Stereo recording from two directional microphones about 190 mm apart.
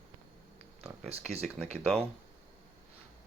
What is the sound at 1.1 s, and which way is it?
Speech, 35° right (ahead or behind).